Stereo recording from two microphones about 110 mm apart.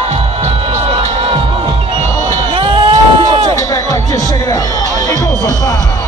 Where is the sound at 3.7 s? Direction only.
35° left (ahead or behind).